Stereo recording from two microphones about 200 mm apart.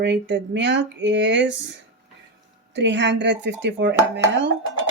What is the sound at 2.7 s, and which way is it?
Speech, 60° right (ahead or behind).